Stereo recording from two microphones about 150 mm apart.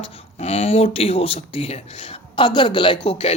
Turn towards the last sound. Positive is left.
turn(degrees=40)  # may be behind; listen again after turning